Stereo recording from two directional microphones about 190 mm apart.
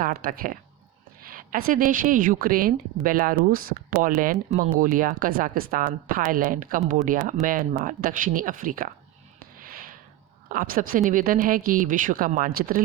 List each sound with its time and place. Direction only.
0.0 s a woman's voice: 50° right (ahead or behind)
9.6 s a sound: 45° right (ahead or behind)
10.5 s a woman's voice: 45° right (ahead or behind)